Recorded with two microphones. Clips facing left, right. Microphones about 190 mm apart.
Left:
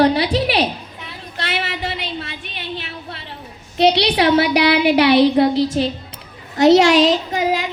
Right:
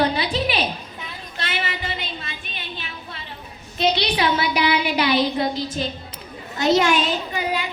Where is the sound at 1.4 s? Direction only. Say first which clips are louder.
Left 4 dB; 70° left (ahead or behind).